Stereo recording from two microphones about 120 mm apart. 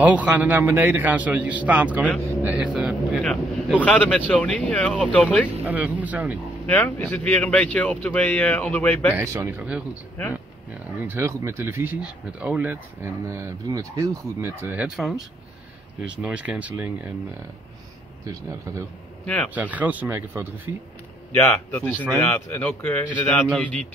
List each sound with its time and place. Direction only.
0.0 s a man's voice: 10° right (ahead or behind); by 5.5 s 10° left (ahead or behind)
5.7 s a man's voice: 15° right (ahead or behind)
6.6 s speech: 15° left (ahead or behind)
9.1 s speech: 25° right (ahead or behind)
9.5 s a man's voice: 10° right (ahead or behind)
11.1 s speech: 20° right (ahead or behind)
16.0 s a man's voice: 10° right (ahead or behind)
19.2 s speech: 10° left (ahead or behind)
19.5 s a man's voice: 15° right (ahead or behind)
21.4 s a man's voice: 15° left (ahead or behind)